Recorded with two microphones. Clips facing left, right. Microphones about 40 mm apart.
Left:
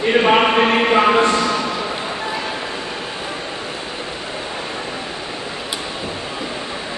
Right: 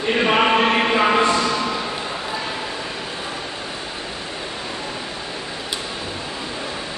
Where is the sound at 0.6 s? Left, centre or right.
Centre.